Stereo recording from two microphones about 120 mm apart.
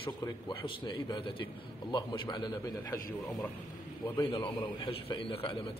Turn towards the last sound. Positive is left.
turn(degrees=45)  # may be behind; listen again after turning